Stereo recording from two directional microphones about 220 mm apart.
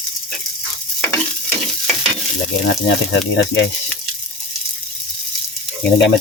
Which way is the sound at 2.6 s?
55° left (ahead or behind).